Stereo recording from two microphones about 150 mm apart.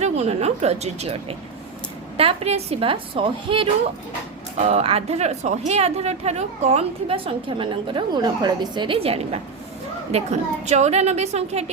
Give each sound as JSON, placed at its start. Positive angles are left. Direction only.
{"t": 0.0, "sound": "a woman's voice", "side_deg": -45}
{"t": 10.7, "sound": "speech", "side_deg": -50}